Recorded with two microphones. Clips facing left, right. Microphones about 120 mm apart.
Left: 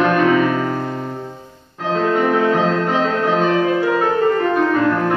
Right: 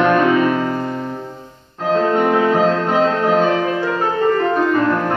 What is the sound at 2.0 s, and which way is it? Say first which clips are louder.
Music: left 1 dB; 30° right (ahead or behind).